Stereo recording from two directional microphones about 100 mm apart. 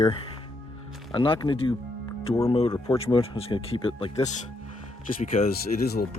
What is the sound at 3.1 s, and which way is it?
Speech, 65° left (ahead or behind).